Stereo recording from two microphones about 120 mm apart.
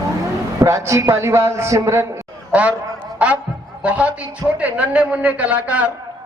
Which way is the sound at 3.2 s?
10° right (ahead or behind).